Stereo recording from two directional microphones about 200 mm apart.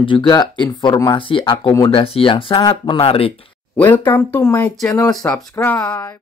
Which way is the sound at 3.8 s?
10° left (ahead or behind).